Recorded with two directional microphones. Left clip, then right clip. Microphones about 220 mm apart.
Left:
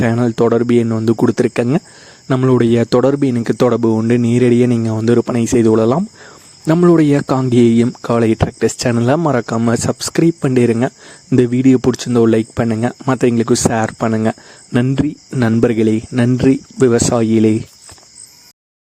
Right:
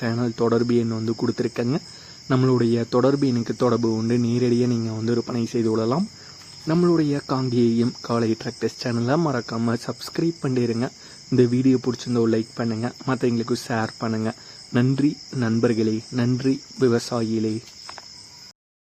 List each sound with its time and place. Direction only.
0.0 s speech: 40° left (ahead or behind)